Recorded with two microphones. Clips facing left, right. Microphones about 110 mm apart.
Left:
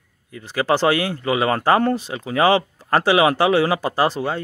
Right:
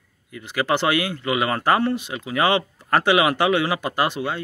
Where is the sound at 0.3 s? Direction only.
35° left (ahead or behind).